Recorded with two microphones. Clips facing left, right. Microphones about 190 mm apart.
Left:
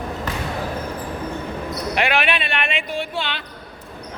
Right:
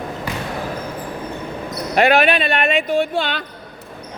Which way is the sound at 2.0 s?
40° right (ahead or behind).